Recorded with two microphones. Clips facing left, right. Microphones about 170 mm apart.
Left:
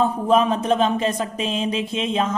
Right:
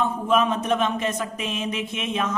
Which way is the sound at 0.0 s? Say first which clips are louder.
Left 4 dB; 35° left (ahead or behind).